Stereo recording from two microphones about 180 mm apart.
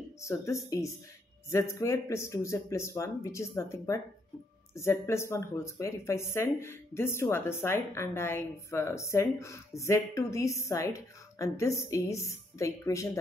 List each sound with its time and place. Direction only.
0.2 s speech: 15° left (ahead or behind)